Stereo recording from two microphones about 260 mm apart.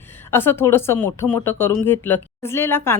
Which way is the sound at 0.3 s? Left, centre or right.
Centre.